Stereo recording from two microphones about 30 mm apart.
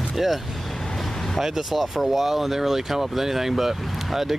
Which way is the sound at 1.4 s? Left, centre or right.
Centre.